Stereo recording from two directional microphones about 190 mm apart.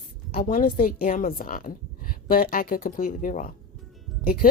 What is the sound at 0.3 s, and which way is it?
Speech, 50° left (ahead or behind).